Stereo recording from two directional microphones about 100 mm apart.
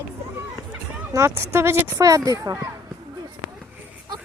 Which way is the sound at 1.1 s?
30° right (ahead or behind).